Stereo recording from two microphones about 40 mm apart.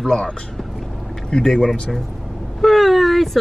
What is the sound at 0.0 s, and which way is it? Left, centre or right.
Speech, centre.